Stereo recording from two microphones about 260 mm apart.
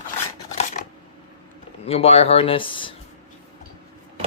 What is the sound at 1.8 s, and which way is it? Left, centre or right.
Speech, left.